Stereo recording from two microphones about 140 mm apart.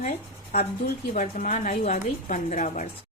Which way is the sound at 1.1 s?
60° left (ahead or behind).